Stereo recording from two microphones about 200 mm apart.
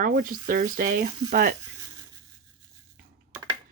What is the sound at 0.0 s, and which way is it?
Speech, 45° right (ahead or behind).